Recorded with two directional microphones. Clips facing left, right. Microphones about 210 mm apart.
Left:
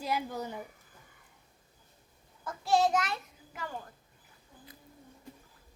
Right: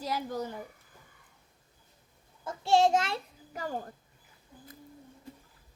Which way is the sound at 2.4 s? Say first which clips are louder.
Right 3 dB; 25° right (ahead or behind).